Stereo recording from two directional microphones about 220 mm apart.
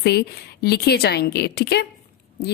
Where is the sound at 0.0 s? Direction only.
50° left (ahead or behind).